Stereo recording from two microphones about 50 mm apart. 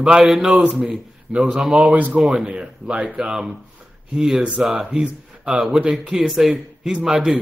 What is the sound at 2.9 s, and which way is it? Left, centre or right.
Speech, right.